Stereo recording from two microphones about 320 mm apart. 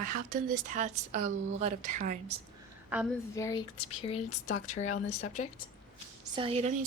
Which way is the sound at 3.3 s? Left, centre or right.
Centre.